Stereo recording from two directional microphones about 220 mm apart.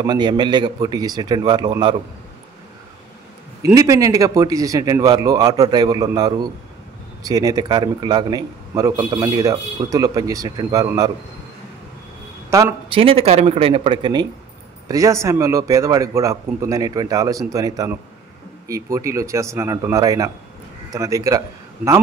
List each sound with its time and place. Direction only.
0.0 s a man's voice: 20° right (ahead or behind)
3.6 s a man's voice: 15° right (ahead or behind)
12.4 s a sound: 15° right (ahead or behind)
12.9 s a man's voice: 25° right (ahead or behind)